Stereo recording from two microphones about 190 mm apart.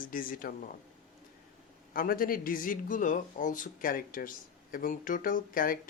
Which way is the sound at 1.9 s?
50° left (ahead or behind).